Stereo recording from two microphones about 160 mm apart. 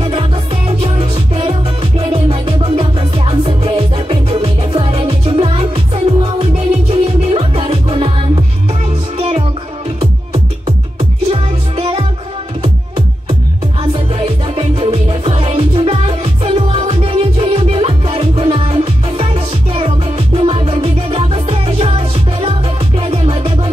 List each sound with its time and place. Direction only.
0.7 s music: 40° right (ahead or behind)
11.0 s music: 40° right (ahead or behind)